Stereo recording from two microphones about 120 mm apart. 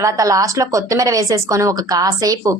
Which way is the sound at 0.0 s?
30° right (ahead or behind).